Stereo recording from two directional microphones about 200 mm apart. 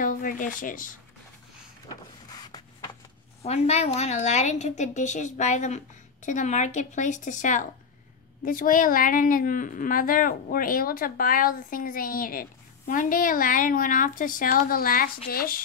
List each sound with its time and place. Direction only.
0.0 s speech: 40° left (ahead or behind)
1.9 s a sound: 20° left (ahead or behind)
3.4 s a woman's voice: 30° left (ahead or behind)